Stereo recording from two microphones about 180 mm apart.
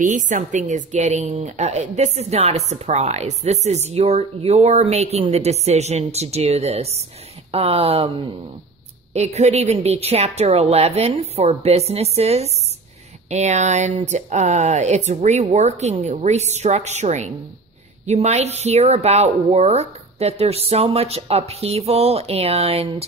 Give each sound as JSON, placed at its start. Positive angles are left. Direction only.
{"t": 0.0, "sound": "speech", "side_deg": -45}